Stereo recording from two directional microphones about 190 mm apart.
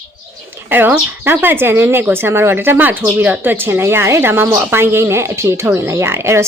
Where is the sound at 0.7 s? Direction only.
10° right (ahead or behind).